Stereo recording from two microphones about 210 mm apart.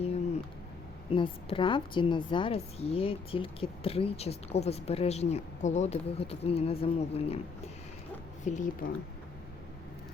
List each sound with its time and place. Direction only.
1.1 s a woman's voice: 25° left (ahead or behind)
8.5 s speech: 35° left (ahead or behind)